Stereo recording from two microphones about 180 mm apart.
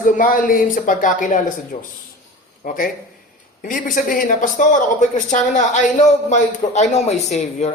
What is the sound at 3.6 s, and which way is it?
Speech, 50° left (ahead or behind).